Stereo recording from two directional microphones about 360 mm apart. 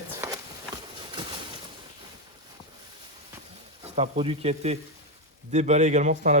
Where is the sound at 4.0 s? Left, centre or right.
Centre.